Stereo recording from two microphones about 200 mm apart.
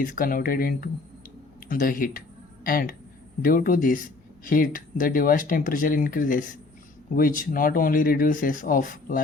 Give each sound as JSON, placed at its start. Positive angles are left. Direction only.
{"t": 0.0, "sound": "speech", "side_deg": 45}